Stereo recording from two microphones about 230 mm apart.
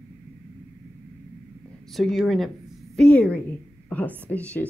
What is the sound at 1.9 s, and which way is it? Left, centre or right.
Speech, centre.